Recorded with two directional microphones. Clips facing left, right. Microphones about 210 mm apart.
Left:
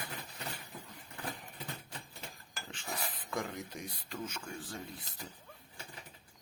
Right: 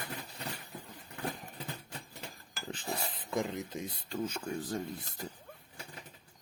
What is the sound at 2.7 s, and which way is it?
Speech, 35° right (ahead or behind).